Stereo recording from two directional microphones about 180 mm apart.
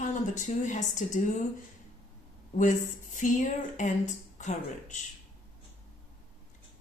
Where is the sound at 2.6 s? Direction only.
45° left (ahead or behind).